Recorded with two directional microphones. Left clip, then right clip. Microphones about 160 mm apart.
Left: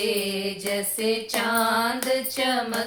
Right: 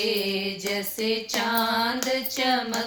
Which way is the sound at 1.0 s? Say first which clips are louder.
Left 1 dB; 20° left (ahead or behind).